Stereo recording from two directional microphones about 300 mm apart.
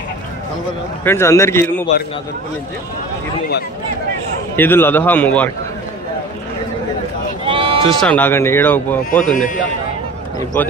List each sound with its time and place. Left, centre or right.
1.0 s speech: centre
4.6 s speech: centre
7.4 s bleat: centre
7.9 s speech: centre
9.2 s a man's voice: left